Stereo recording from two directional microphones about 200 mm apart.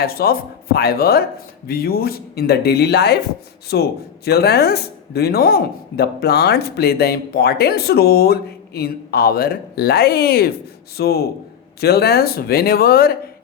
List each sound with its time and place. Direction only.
0.0 s speech: 50° left (ahead or behind)